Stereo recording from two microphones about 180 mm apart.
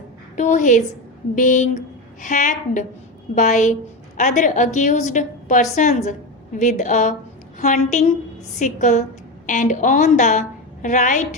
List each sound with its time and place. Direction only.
0.3 s a woman's voice: 45° left (ahead or behind)